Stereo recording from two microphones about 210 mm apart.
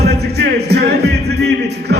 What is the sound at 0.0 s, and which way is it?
Music, 50° right (ahead or behind).